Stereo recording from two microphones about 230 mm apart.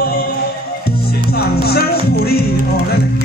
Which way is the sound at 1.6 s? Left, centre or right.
Left.